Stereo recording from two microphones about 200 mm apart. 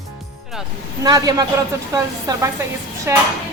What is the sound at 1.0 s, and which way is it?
A man's voice, 15° right (ahead or behind).